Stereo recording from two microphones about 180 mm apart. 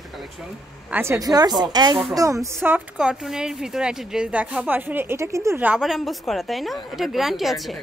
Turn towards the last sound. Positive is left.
turn(degrees=0)  # may be behind; listen again after turning